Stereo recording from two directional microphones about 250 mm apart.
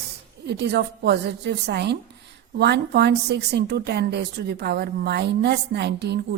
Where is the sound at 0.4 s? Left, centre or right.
Right.